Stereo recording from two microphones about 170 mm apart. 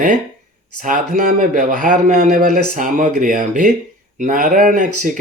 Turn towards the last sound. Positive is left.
turn(degrees=-50)  # may be behind; listen again after turning